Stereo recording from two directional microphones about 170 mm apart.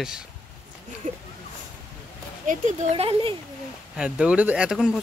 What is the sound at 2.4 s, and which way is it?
Speech, 45° right (ahead or behind).